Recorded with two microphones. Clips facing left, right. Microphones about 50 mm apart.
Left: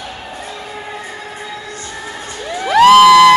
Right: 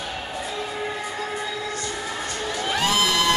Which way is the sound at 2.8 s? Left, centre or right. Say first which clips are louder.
Left 18 dB; left.